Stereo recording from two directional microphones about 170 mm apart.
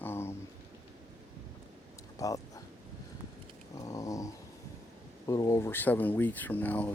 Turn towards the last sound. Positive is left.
turn(degrees=10)  # may be behind; listen again after turning